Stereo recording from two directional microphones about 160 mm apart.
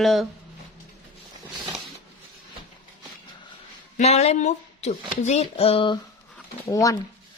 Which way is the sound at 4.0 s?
45° left (ahead or behind).